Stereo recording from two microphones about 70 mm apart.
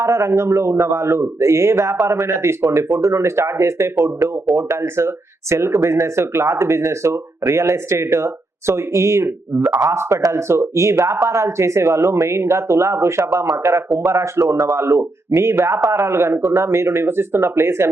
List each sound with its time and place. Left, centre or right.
0.0 s a man's voice: right